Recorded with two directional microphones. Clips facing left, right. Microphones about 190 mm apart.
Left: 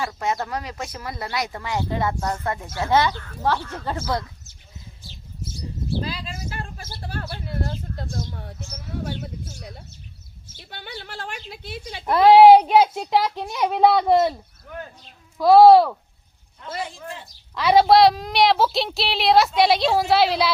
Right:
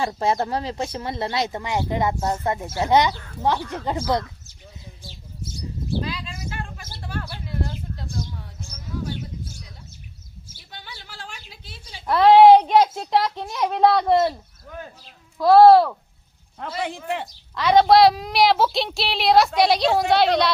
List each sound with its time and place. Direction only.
0.0 s speech: 30° right (ahead or behind)
6.0 s bird: 35° left (ahead or behind)
9.0 s a woman's voice: 60° left (ahead or behind)
12.0 s a child's voice: 15° left (ahead or behind)
15.4 s a child's voice: centre (ahead or behind)
16.6 s a man's voice: 70° right (ahead or behind)
17.5 s a child's voice: 5° left (ahead or behind)